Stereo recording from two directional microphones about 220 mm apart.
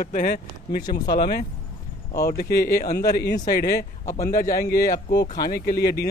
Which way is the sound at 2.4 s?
45° left (ahead or behind).